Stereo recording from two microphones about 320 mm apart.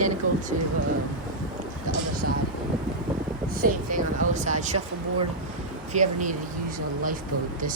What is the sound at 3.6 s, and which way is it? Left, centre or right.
Speech, right.